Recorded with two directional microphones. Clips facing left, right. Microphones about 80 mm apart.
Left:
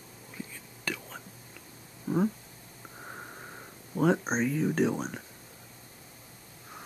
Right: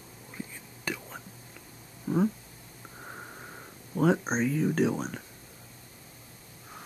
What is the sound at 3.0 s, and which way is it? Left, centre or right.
Wheeze, centre.